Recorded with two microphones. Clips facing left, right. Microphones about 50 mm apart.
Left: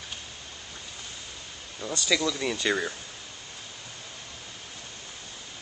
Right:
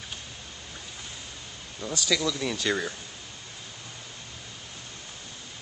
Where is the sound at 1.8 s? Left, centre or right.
Centre.